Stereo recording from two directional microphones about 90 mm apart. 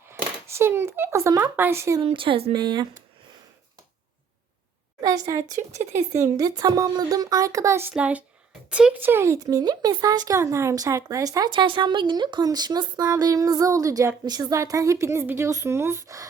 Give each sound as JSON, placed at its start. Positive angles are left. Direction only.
{"t": 0.1, "sound": "speech", "side_deg": -25}
{"t": 2.0, "sound": "speech", "side_deg": -85}
{"t": 4.9, "sound": "speech", "side_deg": -40}
{"t": 7.9, "sound": "speech", "side_deg": -15}
{"t": 9.0, "sound": "speech", "side_deg": -30}
{"t": 11.5, "sound": "speech", "side_deg": -65}
{"t": 14.3, "sound": "speech", "side_deg": -50}
{"t": 14.5, "sound": "speech", "side_deg": -35}